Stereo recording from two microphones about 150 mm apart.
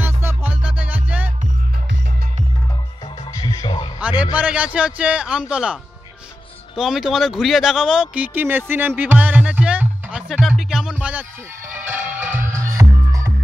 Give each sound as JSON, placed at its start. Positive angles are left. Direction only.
{"t": 0.0, "sound": "music", "side_deg": -15}
{"t": 3.3, "sound": "music", "side_deg": 25}
{"t": 4.2, "sound": "a man's voice", "side_deg": -10}
{"t": 10.3, "sound": "music", "side_deg": 0}
{"t": 12.7, "sound": "music", "side_deg": -25}